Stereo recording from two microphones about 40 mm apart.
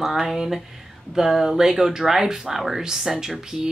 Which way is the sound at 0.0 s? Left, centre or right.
Centre.